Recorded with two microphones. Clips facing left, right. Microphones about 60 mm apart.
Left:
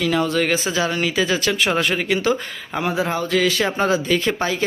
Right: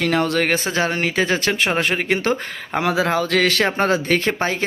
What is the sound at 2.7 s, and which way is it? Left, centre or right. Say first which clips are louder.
Speech: right 3 dB; right.